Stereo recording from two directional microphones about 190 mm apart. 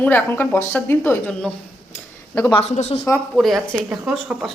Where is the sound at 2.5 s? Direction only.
35° left (ahead or behind).